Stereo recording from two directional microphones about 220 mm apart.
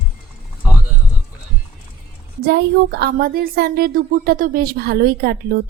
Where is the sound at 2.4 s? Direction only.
50° right (ahead or behind).